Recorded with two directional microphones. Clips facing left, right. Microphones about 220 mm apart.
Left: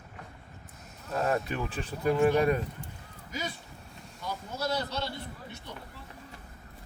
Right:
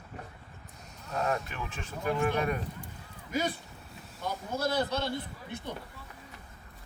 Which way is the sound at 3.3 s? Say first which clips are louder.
Right 6 dB; 55° right (ahead or behind).